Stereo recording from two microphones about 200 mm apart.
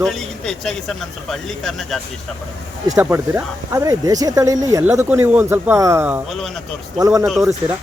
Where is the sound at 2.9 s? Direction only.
10° right (ahead or behind).